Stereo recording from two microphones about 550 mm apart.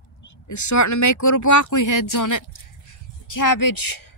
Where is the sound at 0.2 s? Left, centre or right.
Left.